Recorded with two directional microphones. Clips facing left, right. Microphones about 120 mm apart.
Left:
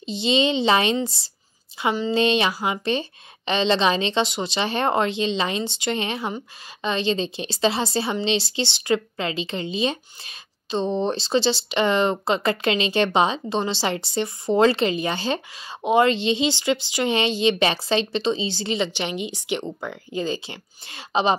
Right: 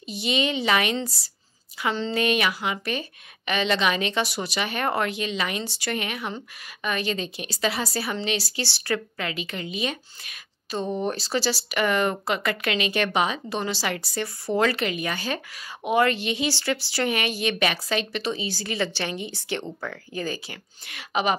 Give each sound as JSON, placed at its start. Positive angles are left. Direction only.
{"t": 0.0, "sound": "a woman's voice", "side_deg": 25}